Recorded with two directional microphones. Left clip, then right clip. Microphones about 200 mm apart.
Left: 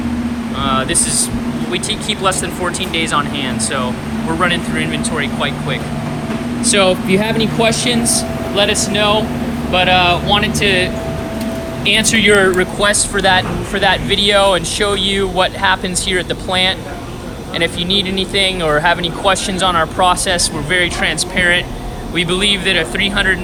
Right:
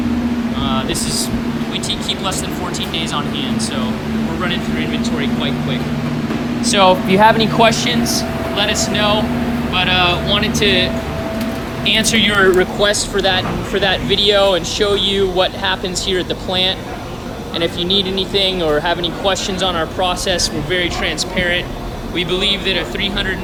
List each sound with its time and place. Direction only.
0.6 s vehicle: 15° right (ahead or behind)
1.7 s speech: 20° right (ahead or behind)
4.4 s speech: 5° right (ahead or behind)
6.7 s speech: 15° right (ahead or behind)
9.7 s speech: 5° right (ahead or behind)
11.9 s speech: 10° right (ahead or behind)
12.5 s speech: 30° left (ahead or behind); by 23.4 s 5° right (ahead or behind)